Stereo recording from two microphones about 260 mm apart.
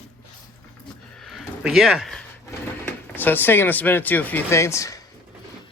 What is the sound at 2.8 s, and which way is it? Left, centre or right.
Speech, centre.